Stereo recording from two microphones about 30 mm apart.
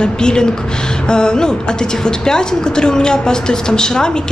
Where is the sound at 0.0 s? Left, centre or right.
Left.